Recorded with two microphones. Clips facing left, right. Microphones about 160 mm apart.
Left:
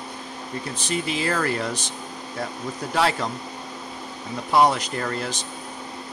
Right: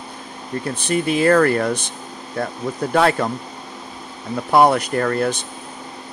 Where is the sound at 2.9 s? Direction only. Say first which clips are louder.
Right 6 dB; 55° right (ahead or behind).